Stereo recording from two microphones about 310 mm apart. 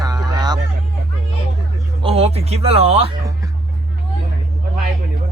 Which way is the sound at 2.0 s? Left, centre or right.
Centre.